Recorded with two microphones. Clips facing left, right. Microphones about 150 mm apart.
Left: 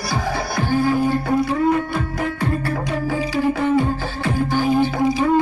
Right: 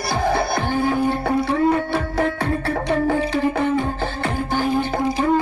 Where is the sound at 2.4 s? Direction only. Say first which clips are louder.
Even; 60° right (ahead or behind).